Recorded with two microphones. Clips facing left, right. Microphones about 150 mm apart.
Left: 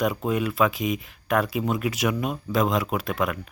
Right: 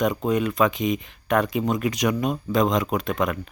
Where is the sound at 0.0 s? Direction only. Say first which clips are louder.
Right 2 dB; 5° left (ahead or behind).